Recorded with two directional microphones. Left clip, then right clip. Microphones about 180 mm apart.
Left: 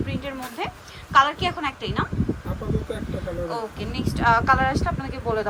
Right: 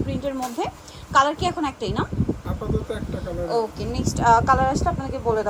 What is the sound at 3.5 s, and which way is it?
A woman's voice, 25° right (ahead or behind).